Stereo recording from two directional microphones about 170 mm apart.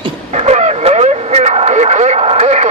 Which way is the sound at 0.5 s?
40° right (ahead or behind).